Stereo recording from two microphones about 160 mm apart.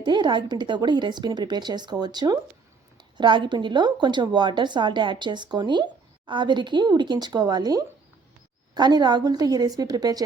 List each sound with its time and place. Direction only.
0.0 s a woman's voice: 30° right (ahead or behind)